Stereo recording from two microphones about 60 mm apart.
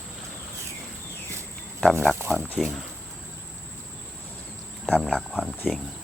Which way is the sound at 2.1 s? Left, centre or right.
Right.